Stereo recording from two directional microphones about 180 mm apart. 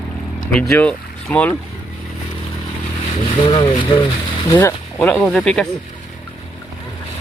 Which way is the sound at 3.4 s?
25° left (ahead or behind).